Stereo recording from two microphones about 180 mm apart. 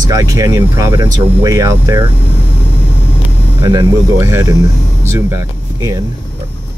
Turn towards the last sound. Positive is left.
turn(degrees=-15)  # may be behind; listen again after turning